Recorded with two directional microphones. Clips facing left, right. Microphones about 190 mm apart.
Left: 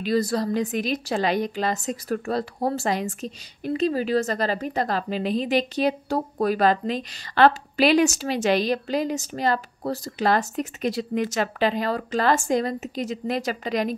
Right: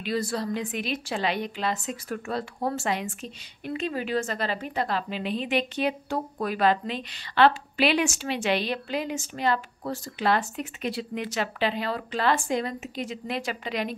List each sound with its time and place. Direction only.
0.0 s a woman's voice: 40° left (ahead or behind)